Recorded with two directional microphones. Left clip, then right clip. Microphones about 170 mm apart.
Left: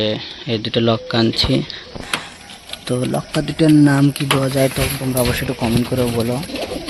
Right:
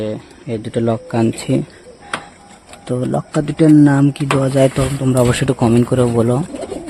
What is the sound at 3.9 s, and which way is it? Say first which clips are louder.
Speech: right 1 dB; 10° right (ahead or behind).